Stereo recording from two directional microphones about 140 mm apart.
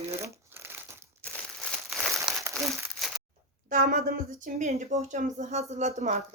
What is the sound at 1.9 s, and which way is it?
Crumpling, centre (ahead or behind).